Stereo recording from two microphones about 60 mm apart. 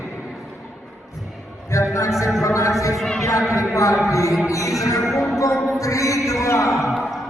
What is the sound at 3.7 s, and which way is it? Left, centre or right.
Speech, left.